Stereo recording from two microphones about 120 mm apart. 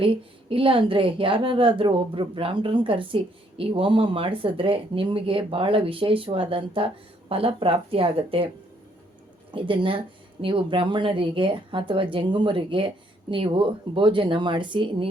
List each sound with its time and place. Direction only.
0.0 s a woman's voice: 50° right (ahead or behind)
9.5 s a woman's voice: 45° right (ahead or behind)